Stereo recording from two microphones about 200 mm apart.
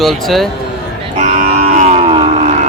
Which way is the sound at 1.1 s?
35° right (ahead or behind).